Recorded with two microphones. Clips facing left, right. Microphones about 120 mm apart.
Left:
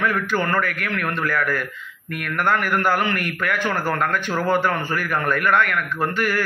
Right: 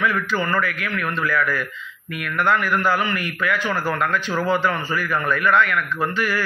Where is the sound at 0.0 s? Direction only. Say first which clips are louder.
Even; 50° left (ahead or behind).